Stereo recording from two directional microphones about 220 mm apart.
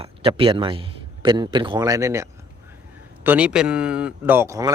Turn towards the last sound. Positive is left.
turn(degrees=-15)  # may be behind; listen again after turning